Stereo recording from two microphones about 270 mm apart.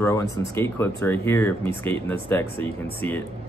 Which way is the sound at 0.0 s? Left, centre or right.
Centre.